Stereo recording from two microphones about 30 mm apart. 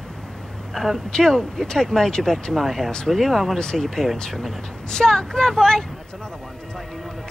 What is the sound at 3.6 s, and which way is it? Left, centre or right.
Speech, left.